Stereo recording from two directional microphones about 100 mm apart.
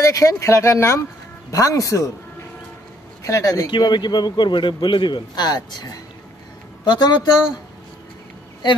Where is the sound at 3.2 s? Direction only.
35° left (ahead or behind).